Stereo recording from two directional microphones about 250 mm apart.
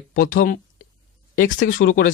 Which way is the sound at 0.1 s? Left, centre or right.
Left.